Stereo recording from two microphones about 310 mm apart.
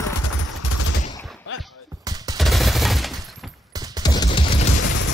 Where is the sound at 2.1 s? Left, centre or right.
Centre.